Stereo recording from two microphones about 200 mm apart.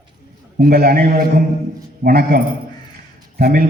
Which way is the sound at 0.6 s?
50° right (ahead or behind).